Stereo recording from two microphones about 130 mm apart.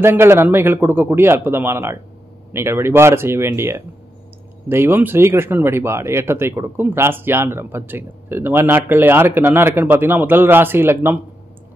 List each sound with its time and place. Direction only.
0.0 s speech: 20° right (ahead or behind)